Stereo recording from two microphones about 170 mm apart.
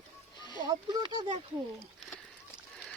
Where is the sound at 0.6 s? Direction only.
25° right (ahead or behind).